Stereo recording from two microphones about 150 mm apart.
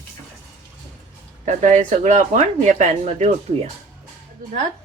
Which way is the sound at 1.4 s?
55° right (ahead or behind).